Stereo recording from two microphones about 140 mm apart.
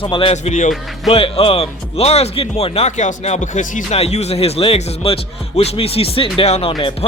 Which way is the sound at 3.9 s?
50° left (ahead or behind).